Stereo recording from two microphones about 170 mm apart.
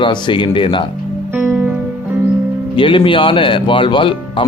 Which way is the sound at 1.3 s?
10° right (ahead or behind).